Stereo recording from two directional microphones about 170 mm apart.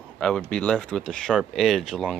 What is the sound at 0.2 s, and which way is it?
Speech, 5° left (ahead or behind).